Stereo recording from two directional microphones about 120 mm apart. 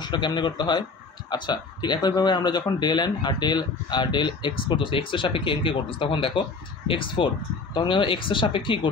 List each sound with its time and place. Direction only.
0.0 s a man's voice: 40° left (ahead or behind)